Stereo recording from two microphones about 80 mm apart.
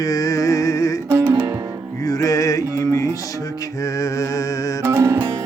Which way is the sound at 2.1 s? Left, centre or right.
Left.